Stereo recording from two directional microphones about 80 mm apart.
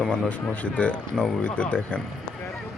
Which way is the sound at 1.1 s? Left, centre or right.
Centre.